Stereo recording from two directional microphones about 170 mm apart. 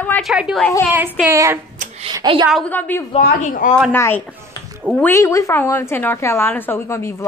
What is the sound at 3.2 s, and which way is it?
Speech, 55° left (ahead or behind).